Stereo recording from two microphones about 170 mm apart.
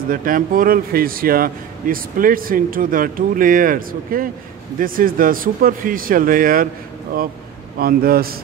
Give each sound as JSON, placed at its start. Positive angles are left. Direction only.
{"t": 0.1, "sound": "speech", "side_deg": -55}
{"t": 7.8, "sound": "speech", "side_deg": -60}